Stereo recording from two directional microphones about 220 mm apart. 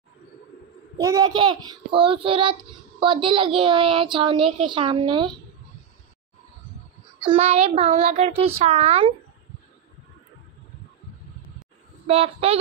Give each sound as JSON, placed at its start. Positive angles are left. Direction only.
{"t": 0.9, "sound": "a woman's voice", "side_deg": -15}
{"t": 7.2, "sound": "a woman's voice", "side_deg": -25}
{"t": 8.0, "sound": "child singing", "side_deg": -30}
{"t": 8.5, "sound": "a woman's voice", "side_deg": -30}
{"t": 12.1, "sound": "a woman's voice", "side_deg": -25}